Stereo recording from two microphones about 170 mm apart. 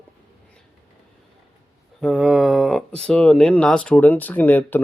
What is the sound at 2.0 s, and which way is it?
Speech, 5° right (ahead or behind).